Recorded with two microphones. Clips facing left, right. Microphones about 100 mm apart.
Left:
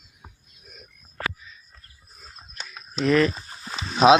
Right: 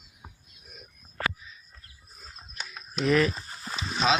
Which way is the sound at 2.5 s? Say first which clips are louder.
Left 3 dB; 5° right (ahead or behind).